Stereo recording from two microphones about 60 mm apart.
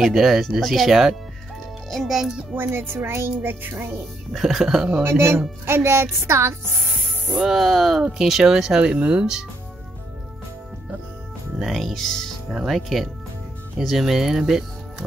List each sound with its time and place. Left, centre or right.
0.0 s speech: centre
2.5 s speech: right
4.3 s speech: centre
5.0 s a woman's voice: right
7.3 s speech: centre; by 9.2 s right
11.5 s speech: centre
12.4 s speech: centre